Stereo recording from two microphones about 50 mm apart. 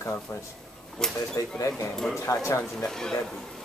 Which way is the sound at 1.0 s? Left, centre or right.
Centre.